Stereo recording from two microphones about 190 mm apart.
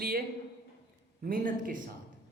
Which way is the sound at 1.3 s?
45° right (ahead or behind).